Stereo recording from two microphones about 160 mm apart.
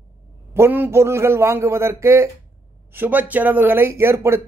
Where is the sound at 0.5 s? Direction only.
15° right (ahead or behind).